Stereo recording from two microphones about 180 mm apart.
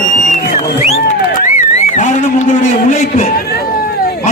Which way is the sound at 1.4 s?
45° left (ahead or behind).